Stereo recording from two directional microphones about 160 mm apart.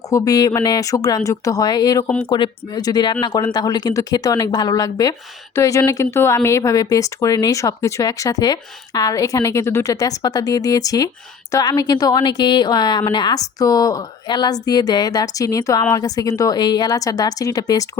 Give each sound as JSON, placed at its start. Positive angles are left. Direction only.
{"t": 0.1, "sound": "speech", "side_deg": 25}